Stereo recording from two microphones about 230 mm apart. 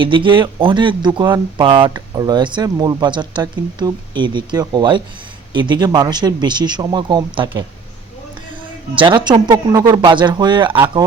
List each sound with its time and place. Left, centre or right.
0.0 s speech: right
9.0 s speech: centre